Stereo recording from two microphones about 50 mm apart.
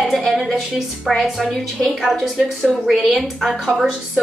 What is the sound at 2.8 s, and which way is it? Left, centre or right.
A woman's voice, centre.